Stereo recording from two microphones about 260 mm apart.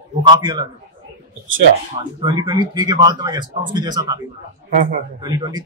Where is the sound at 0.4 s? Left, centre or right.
Centre.